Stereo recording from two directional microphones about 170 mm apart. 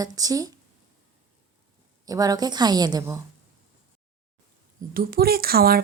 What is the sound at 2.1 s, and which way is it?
A woman's voice, 20° right (ahead or behind).